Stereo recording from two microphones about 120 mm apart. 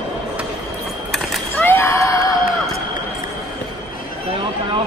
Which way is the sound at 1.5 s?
15° left (ahead or behind).